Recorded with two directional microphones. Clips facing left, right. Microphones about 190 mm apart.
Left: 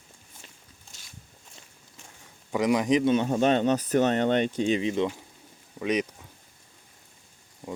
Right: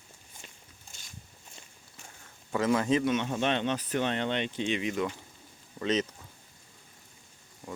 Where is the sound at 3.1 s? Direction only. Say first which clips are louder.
Left 6 dB; 35° left (ahead or behind).